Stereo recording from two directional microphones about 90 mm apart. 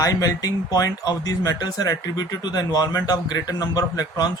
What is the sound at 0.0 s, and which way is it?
A man's voice, 40° left (ahead or behind).